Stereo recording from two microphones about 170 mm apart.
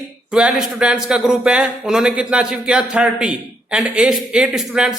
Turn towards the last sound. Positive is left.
turn(degrees=-5)  # may be behind; listen again after turning